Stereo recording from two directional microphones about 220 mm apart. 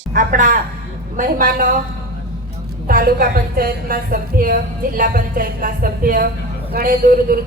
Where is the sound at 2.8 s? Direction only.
40° right (ahead or behind).